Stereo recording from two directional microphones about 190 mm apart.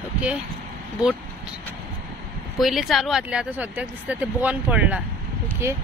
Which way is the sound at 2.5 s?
Centre (ahead or behind).